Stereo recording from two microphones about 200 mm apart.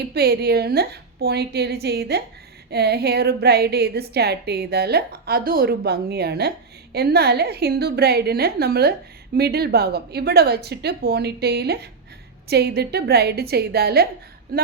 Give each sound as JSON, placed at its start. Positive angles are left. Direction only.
{"t": 0.1, "sound": "a woman's voice", "side_deg": -50}